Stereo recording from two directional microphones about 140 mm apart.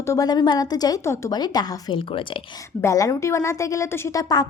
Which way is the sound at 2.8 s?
25° left (ahead or behind).